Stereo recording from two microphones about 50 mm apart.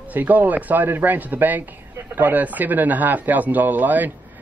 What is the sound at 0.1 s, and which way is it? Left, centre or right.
Speech, right.